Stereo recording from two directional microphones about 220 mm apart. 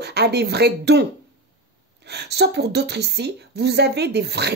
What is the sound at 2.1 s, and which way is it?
Speech, 50° right (ahead or behind).